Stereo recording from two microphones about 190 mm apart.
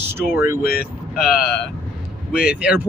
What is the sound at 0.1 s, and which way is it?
Speech, 15° right (ahead or behind).